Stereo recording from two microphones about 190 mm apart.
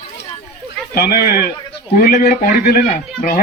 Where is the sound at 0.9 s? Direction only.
55° left (ahead or behind).